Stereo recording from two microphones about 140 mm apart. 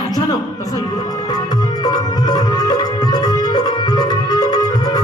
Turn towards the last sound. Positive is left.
turn(degrees=30)  # may be behind; listen again after turning